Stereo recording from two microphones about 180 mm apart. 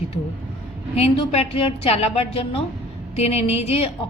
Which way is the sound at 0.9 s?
35° left (ahead or behind).